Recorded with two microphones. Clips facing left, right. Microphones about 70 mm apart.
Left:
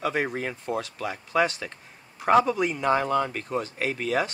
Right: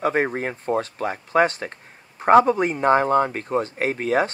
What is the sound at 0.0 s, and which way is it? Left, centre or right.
Speech, right.